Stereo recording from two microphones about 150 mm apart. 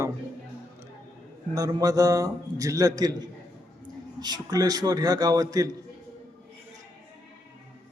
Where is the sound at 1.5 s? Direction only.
25° right (ahead or behind).